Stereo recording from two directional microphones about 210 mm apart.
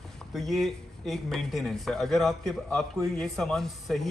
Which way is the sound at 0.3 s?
Centre (ahead or behind).